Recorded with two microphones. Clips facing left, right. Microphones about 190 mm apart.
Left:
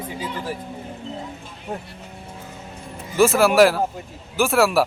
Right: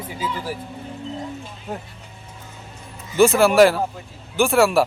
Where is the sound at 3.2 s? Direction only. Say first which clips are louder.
Right 1 dB; centre (ahead or behind).